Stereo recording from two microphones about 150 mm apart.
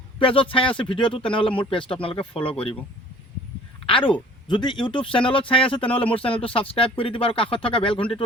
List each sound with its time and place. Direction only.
0.2 s speech: 35° left (ahead or behind)
3.8 s speech: 35° left (ahead or behind)